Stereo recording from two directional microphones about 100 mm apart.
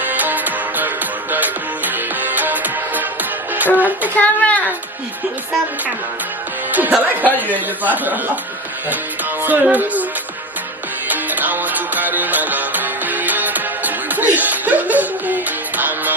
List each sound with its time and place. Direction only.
0.0 s music: 15° right (ahead or behind)
3.8 s child singing: 15° right (ahead or behind)
4.1 s a woman's voice: 15° left (ahead or behind)
6.7 s speech: 15° right (ahead or behind)
9.4 s speech: 15° right (ahead or behind)
11.1 s music: 15° right (ahead or behind)